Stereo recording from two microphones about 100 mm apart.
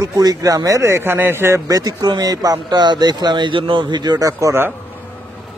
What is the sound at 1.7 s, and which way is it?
Speech, 35° right (ahead or behind).